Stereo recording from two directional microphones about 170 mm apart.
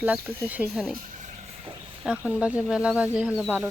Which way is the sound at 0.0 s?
10° right (ahead or behind).